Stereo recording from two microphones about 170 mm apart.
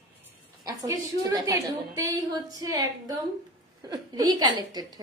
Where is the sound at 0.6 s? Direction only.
20° right (ahead or behind).